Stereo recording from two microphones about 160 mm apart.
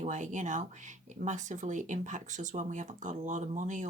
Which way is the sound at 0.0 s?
50° right (ahead or behind).